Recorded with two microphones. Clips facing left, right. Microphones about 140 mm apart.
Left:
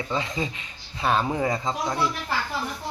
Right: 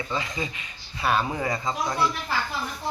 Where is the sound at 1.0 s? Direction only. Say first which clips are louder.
Left 1 dB; 5° right (ahead or behind).